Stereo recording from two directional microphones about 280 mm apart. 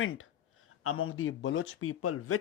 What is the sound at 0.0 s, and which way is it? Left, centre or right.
Speech, left.